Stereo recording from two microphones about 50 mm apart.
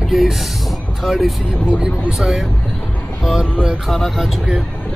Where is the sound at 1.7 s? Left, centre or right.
Centre.